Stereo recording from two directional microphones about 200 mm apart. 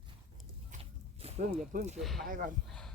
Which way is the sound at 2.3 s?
40° right (ahead or behind).